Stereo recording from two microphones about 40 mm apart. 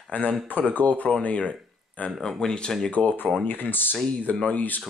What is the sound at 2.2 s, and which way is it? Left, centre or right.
Speech, centre.